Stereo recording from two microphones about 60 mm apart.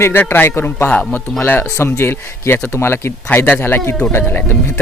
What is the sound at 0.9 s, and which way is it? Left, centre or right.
Speech, left.